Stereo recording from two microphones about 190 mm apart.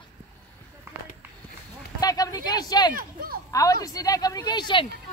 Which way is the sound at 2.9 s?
50° right (ahead or behind).